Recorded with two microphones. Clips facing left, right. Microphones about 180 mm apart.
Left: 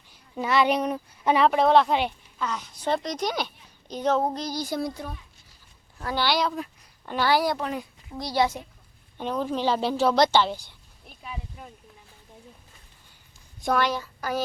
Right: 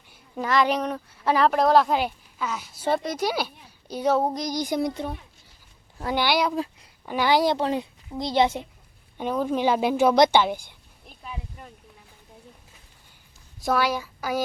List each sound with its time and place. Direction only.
0.3 s a woman's voice: 5° left (ahead or behind)
1.4 s a woman's voice: centre (ahead or behind); by 8.6 s 25° right (ahead or behind)
9.1 s a woman's voice: 10° right (ahead or behind)
11.2 s a sound: 5° left (ahead or behind)
13.6 s a woman's voice: 5° right (ahead or behind)